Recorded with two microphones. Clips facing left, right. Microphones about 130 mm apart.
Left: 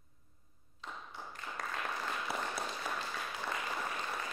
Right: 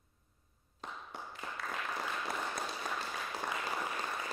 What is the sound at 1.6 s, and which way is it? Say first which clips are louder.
Applause: left 1 dB; 45° left (ahead or behind).